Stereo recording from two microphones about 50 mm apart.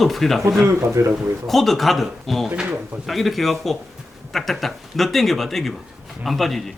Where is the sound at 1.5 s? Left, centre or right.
Centre.